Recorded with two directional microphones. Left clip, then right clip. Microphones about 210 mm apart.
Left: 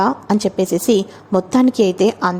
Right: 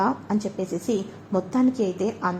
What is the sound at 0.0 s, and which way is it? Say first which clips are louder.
A woman's voice: left 8 dB; 35° left (ahead or behind).